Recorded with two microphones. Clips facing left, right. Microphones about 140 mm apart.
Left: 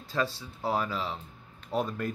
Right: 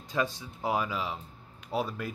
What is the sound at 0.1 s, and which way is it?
Speech, 15° right (ahead or behind).